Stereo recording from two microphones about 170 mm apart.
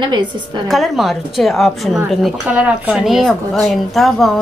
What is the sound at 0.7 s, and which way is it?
A woman's voice, centre (ahead or behind).